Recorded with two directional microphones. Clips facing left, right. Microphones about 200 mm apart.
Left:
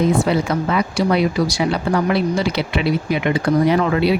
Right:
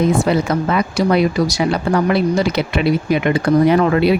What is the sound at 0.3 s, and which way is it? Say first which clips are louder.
Speech: right 2 dB; 45° right (ahead or behind).